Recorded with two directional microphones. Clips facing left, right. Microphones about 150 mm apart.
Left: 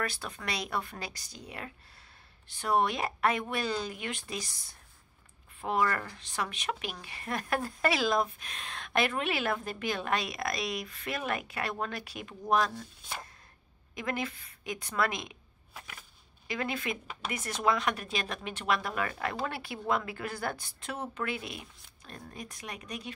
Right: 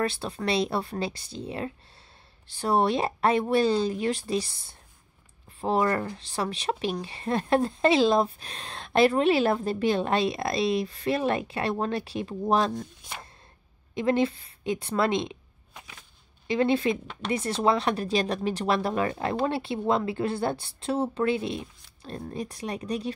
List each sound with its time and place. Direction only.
0.0 s speech: 30° right (ahead or behind)
13.9 s speech: 30° right (ahead or behind)
15.7 s a sound: 5° left (ahead or behind)
16.4 s speech: 30° right (ahead or behind)